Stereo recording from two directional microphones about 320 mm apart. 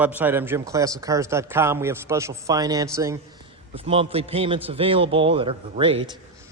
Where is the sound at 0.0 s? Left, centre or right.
Centre.